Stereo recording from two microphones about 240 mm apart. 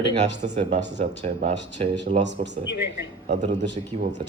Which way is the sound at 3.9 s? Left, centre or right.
Right.